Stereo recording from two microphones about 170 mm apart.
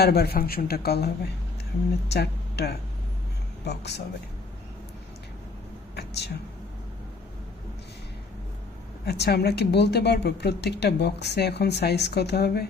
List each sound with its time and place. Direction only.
0.0 s a woman's voice: 65° left (ahead or behind)
6.0 s a sound: 75° left (ahead or behind)
9.0 s a woman's voice: 75° left (ahead or behind)